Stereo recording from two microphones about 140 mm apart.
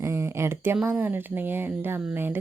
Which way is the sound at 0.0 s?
20° right (ahead or behind).